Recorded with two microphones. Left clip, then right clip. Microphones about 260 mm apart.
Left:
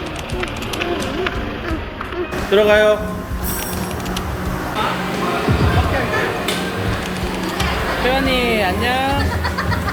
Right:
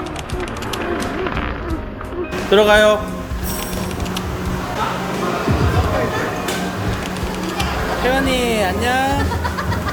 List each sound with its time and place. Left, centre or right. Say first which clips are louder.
2.5 s speech: right 1 dB; right
8.0 s speech: even; centre